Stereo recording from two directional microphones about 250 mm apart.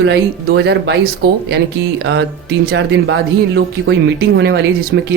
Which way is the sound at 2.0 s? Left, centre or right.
Right.